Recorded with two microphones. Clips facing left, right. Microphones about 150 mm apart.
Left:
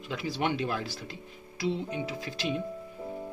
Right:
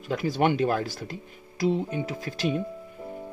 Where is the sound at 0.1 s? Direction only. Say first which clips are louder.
Right 7 dB; 45° right (ahead or behind).